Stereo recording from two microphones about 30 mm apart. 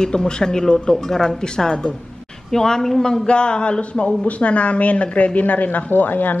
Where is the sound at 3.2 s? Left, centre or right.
Left.